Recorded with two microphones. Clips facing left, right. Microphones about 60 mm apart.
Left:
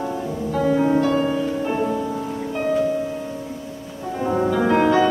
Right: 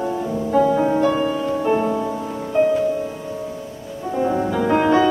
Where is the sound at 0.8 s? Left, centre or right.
Centre.